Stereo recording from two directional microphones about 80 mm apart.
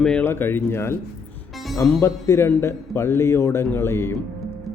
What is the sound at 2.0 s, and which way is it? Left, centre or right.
A man's voice, left.